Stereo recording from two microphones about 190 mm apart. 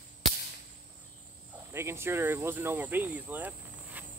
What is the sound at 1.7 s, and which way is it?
Speech, 15° right (ahead or behind).